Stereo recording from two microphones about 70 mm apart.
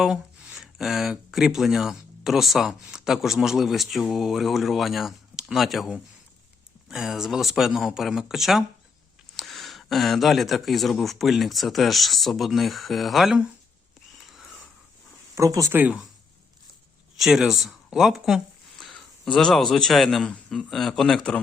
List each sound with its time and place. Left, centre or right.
0.0 s a sound: centre
1.3 s speech: centre
14.3 s wheeze: centre
15.4 s speech: right
17.2 s a sound: centre
19.5 s a man's voice: centre